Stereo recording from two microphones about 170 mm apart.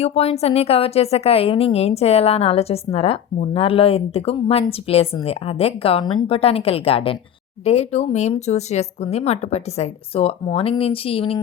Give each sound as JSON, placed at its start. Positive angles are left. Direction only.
{"t": 0.0, "sound": "a woman's voice", "side_deg": 35}